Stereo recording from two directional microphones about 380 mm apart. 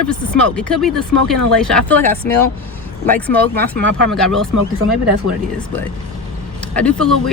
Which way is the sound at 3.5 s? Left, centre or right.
Right.